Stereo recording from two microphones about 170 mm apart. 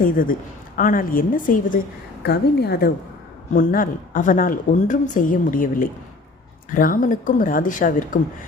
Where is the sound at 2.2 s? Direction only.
70° left (ahead or behind).